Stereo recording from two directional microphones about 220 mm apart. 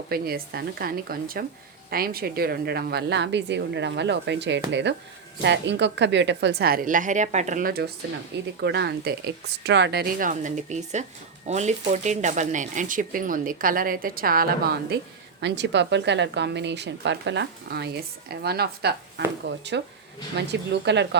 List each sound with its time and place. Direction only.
0.1 s a woman's voice: 45° right (ahead or behind)